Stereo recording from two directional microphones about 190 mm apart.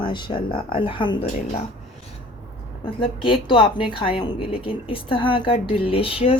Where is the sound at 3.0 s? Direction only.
25° left (ahead or behind).